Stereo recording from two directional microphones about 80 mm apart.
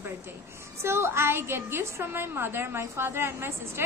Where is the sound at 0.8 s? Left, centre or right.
Right.